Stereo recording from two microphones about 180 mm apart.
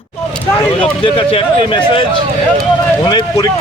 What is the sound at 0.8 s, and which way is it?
A man's voice, 30° left (ahead or behind).